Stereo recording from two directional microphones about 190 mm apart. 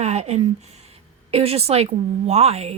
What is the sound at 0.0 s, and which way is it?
A woman's voice, 35° right (ahead or behind).